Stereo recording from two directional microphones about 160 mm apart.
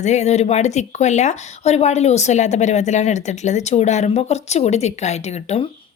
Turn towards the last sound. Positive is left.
turn(degrees=45)  # may be behind; listen again after turning